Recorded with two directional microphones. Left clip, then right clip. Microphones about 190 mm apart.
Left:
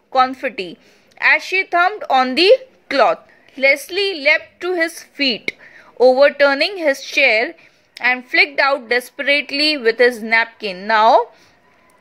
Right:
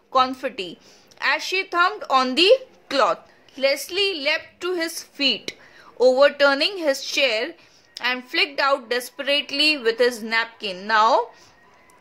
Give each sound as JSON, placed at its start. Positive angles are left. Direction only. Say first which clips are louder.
{"t": 0.1, "sound": "a woman's voice", "louder": "left 4 dB", "side_deg": 15}